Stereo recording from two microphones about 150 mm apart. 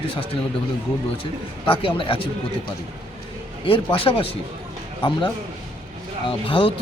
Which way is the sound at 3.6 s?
35° left (ahead or behind).